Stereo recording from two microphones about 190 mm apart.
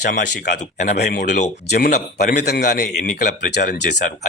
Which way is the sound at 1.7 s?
50° left (ahead or behind).